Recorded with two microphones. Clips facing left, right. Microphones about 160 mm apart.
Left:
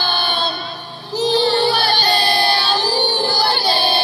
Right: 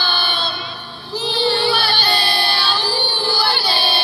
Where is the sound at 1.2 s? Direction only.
40° left (ahead or behind).